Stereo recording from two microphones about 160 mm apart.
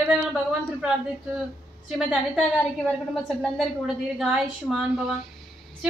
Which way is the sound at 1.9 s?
5° right (ahead or behind).